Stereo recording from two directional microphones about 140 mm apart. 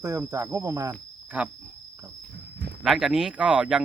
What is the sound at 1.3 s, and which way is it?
Speech, 10° right (ahead or behind).